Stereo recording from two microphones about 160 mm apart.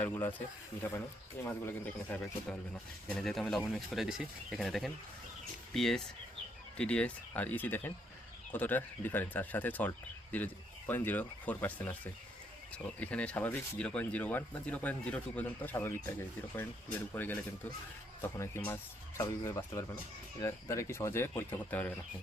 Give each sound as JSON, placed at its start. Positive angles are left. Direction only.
{"t": 0.0, "sound": "speech", "side_deg": 10}
{"t": 18.2, "sound": "speech", "side_deg": 15}